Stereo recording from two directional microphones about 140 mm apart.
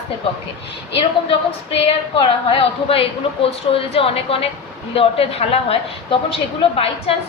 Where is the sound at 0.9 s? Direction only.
40° left (ahead or behind).